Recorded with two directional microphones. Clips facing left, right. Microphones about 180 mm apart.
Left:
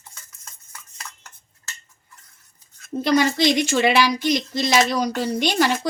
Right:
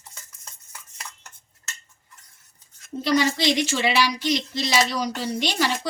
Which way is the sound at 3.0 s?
50° left (ahead or behind).